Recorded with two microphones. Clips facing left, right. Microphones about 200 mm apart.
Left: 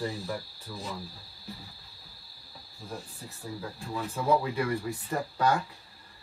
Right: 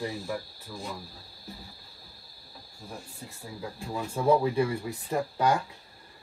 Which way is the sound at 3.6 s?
15° right (ahead or behind).